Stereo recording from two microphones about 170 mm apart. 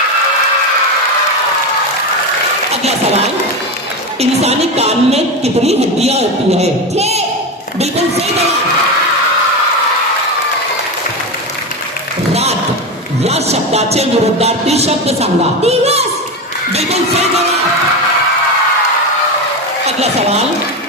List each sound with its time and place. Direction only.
4.2 s speech: 40° right (ahead or behind)
12.3 s a sound: 40° right (ahead or behind)
13.2 s speech: 40° right (ahead or behind)